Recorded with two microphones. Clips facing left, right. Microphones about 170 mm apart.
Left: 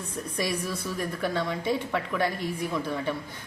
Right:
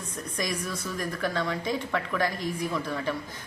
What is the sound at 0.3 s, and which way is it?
Speech, 5° left (ahead or behind).